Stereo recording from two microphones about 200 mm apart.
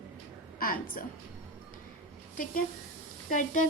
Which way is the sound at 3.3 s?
40° left (ahead or behind).